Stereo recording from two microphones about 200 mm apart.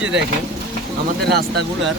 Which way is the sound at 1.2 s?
55° right (ahead or behind).